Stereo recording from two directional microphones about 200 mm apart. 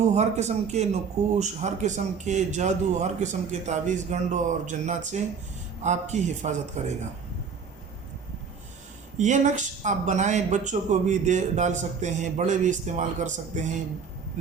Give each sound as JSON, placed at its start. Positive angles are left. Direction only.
{"t": 0.1, "sound": "speech", "side_deg": -35}
{"t": 9.1, "sound": "speech", "side_deg": -35}